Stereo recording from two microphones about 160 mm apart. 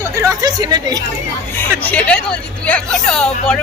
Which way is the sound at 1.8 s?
10° left (ahead or behind).